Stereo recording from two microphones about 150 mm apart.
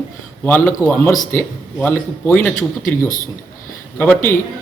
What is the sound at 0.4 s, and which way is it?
Speech, 10° left (ahead or behind).